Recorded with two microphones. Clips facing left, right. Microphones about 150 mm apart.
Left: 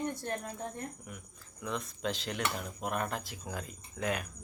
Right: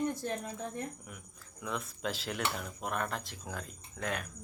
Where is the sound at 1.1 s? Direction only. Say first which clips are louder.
Left 2 dB; centre (ahead or behind).